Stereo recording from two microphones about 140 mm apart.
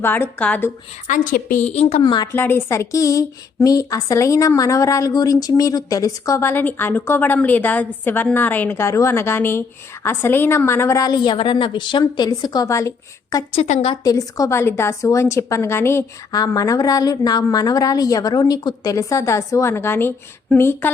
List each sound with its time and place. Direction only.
0.0 s a woman's voice: 15° left (ahead or behind)
1.0 s a woman's voice: 70° left (ahead or behind)
1.6 s a woman's voice: 50° left (ahead or behind)
2.0 s a woman's voice: 30° left (ahead or behind)
2.3 s speech: 15° left (ahead or behind)
13.6 s a woman's voice: 45° left (ahead or behind)
13.9 s speech: 25° left (ahead or behind)